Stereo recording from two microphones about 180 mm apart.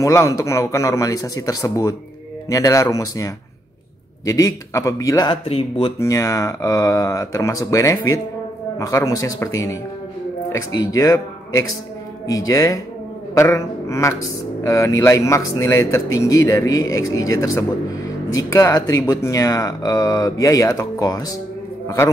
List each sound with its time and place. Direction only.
0.0 s speech: 15° left (ahead or behind)
4.3 s speech: 20° left (ahead or behind)
5.4 s speech: 35° left (ahead or behind)
5.9 s a man's voice: 15° left (ahead or behind)